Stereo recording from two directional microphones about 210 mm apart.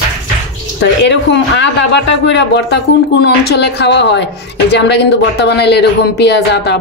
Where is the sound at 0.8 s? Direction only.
55° left (ahead or behind).